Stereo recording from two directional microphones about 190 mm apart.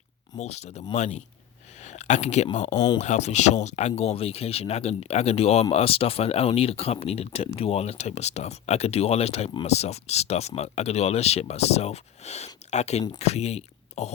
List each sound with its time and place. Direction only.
0.3 s speech: 35° left (ahead or behind)
2.7 s speech: 20° left (ahead or behind)
3.0 s speech: 35° left (ahead or behind)